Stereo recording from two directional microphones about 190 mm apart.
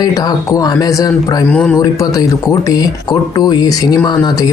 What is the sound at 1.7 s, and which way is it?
Speech, 20° left (ahead or behind).